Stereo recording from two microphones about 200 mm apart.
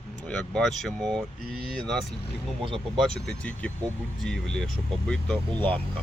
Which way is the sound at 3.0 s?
5° left (ahead or behind).